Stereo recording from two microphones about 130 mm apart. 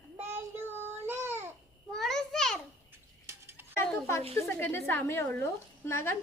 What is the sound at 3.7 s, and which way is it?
A woman's voice, 20° left (ahead or behind).